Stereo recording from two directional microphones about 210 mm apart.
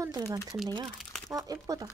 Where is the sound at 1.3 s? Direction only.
15° right (ahead or behind).